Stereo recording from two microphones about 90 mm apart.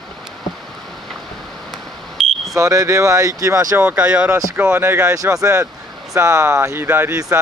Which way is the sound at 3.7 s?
15° right (ahead or behind).